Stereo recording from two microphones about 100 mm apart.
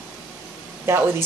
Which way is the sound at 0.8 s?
25° right (ahead or behind).